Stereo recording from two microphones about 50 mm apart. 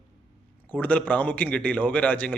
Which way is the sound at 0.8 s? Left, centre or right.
Left.